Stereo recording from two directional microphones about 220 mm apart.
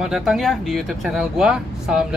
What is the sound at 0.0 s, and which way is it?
Speech, centre (ahead or behind).